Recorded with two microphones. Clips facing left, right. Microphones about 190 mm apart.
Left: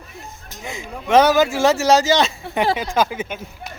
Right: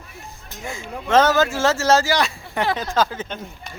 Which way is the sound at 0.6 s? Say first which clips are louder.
Even; 15° left (ahead or behind).